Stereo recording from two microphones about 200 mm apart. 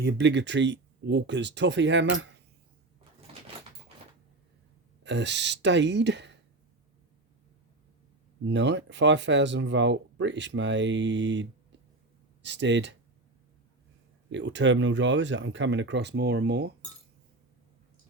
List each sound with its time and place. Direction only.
0.0 s speech: 60° right (ahead or behind)
5.0 s speech: 60° right (ahead or behind)
8.4 s speech: 65° right (ahead or behind)
14.3 s speech: 65° right (ahead or behind)